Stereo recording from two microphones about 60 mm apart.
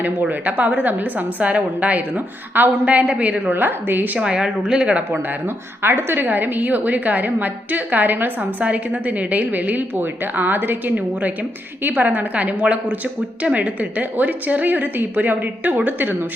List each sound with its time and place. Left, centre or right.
0.0 s a woman's voice: right
3.5 s a woman's voice: right
4.2 s speech: centre
5.8 s a woman's voice: right